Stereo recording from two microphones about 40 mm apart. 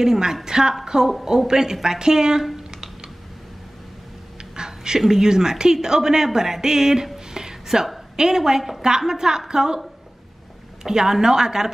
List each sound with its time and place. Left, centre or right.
0.0 s speech: centre
2.5 s typing: centre
4.6 s a woman's voice: centre
10.8 s speech: centre